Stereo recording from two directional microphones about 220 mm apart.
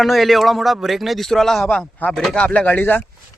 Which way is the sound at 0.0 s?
Centre (ahead or behind).